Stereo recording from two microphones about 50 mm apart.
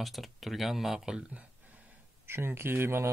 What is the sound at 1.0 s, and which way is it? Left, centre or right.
Speech, centre.